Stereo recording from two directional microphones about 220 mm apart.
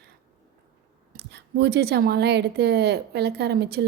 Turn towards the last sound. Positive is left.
turn(degrees=-45)  # may be behind; listen again after turning